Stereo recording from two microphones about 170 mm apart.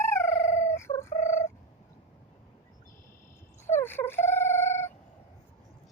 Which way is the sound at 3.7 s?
15° left (ahead or behind).